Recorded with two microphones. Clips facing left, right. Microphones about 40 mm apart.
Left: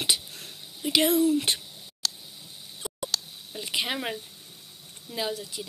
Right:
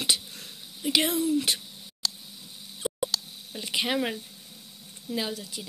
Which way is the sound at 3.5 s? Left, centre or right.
Centre.